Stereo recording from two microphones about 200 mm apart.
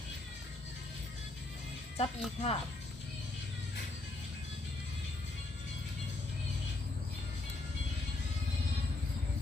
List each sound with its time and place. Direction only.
2.0 s speech: 30° left (ahead or behind)